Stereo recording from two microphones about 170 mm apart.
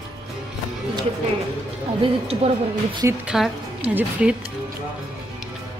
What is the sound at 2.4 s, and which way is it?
Speech, 35° right (ahead or behind).